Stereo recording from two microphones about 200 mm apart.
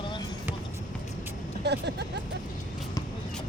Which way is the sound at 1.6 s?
55° right (ahead or behind).